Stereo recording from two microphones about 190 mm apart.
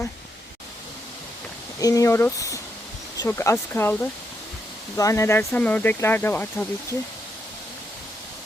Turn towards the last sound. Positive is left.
turn(degrees=10)  # may be behind; listen again after turning